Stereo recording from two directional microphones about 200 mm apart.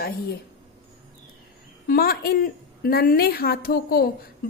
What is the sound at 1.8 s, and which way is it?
A woman's voice, 50° left (ahead or behind).